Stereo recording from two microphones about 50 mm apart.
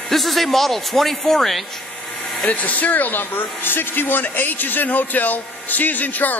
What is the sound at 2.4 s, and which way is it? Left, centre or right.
Speech, left.